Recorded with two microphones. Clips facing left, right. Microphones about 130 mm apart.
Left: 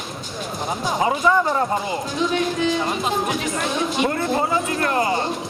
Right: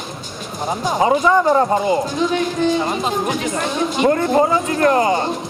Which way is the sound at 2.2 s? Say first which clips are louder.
Right 3 dB; centre (ahead or behind).